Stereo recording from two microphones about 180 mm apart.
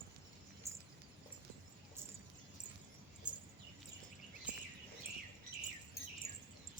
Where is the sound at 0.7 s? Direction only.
15° right (ahead or behind).